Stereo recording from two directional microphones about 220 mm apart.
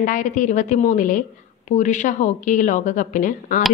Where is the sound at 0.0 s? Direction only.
35° left (ahead or behind).